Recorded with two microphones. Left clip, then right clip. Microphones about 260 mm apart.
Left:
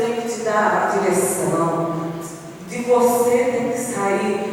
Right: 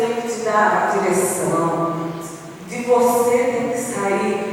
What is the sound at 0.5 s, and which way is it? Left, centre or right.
Speech, centre.